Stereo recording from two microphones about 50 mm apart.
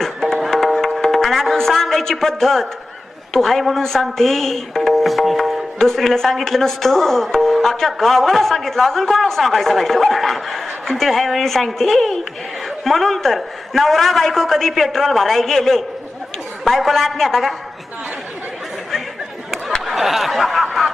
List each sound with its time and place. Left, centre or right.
0.0 s music: centre
3.3 s speech: centre
19.5 s a sound: centre